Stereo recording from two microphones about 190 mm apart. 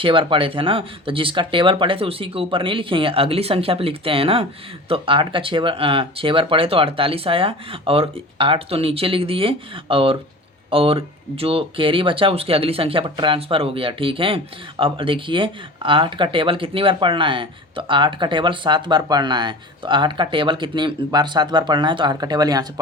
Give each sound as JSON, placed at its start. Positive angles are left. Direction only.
{"t": 0.0, "sound": "speech", "side_deg": -25}